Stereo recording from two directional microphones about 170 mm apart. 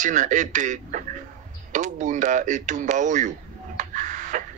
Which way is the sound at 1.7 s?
45° right (ahead or behind).